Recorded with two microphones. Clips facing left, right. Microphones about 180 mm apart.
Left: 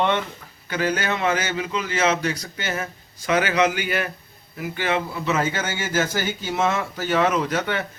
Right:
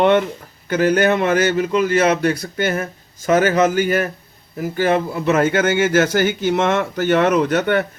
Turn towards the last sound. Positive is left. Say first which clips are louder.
# right 7 dB
turn(degrees=-60)  # may be behind; listen again after turning